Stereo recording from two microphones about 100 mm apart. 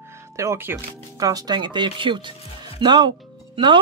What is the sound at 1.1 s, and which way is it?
Speech, 40° right (ahead or behind).